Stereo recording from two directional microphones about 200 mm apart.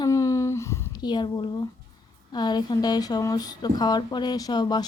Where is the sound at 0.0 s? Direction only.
15° left (ahead or behind).